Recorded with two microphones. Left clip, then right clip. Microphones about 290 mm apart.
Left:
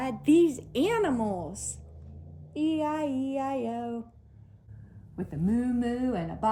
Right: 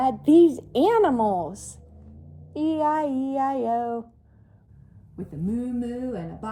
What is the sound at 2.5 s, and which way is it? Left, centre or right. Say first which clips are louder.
A woman's voice: right 6 dB; right.